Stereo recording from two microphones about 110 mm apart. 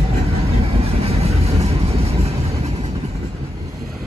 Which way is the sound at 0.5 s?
65° right (ahead or behind).